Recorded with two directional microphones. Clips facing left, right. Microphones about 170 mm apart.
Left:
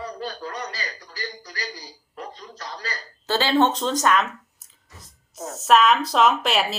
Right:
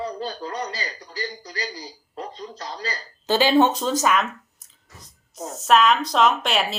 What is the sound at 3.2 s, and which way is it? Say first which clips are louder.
Speech: right 2 dB; 15° right (ahead or behind).